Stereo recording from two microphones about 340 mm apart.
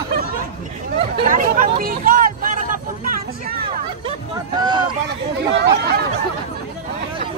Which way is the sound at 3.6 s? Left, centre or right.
Centre.